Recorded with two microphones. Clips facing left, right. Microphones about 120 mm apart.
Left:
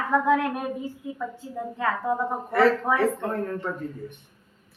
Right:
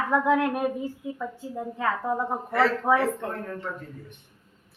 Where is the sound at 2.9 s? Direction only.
25° right (ahead or behind).